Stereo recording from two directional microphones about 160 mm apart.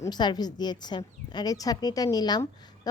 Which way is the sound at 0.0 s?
25° left (ahead or behind).